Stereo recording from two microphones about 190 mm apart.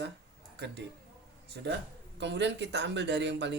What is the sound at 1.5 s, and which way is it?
Speech, 60° right (ahead or behind).